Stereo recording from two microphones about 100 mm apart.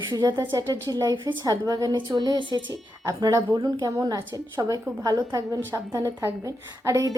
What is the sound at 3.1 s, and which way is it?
A woman's voice, 35° right (ahead or behind).